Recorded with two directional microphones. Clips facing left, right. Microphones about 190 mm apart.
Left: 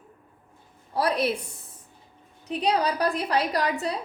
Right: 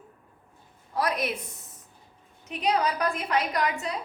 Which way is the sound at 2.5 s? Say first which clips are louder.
Left 2 dB; 35° left (ahead or behind).